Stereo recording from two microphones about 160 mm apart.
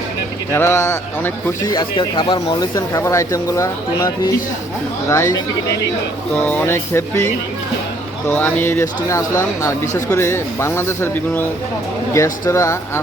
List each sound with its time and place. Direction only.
0.5 s a man's voice: 15° left (ahead or behind)
6.4 s speech: 10° left (ahead or behind)
8.3 s speech: 10° left (ahead or behind)